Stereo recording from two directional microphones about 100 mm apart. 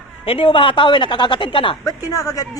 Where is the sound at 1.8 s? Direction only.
35° left (ahead or behind).